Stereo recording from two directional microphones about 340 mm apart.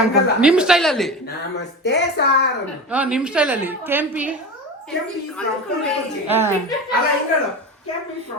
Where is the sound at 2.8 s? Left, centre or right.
Centre.